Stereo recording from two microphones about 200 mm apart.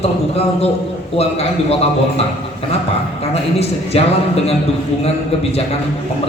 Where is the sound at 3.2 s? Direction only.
30° left (ahead or behind).